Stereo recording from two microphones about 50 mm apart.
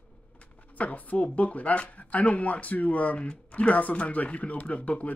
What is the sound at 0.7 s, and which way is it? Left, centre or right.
Speech, left.